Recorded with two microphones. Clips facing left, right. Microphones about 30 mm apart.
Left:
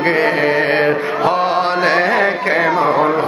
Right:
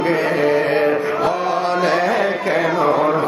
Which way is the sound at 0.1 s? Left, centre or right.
Left.